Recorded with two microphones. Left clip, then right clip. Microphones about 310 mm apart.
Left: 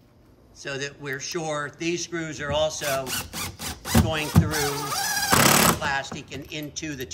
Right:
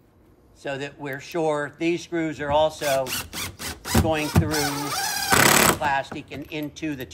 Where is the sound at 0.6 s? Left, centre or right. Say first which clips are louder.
Right 1 dB; centre.